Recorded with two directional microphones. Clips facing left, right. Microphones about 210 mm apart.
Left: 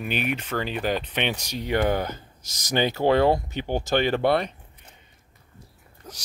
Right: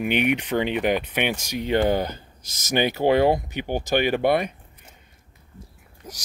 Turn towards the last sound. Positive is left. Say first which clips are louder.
# right 2 dB
turn(degrees=-15)  # may be behind; listen again after turning